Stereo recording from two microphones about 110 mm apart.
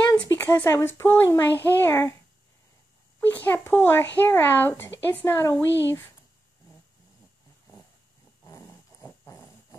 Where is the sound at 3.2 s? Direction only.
15° left (ahead or behind).